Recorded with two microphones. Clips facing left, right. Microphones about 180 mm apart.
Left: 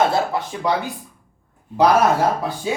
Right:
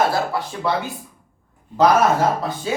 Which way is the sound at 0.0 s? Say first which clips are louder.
Left 1 dB; 20° left (ahead or behind).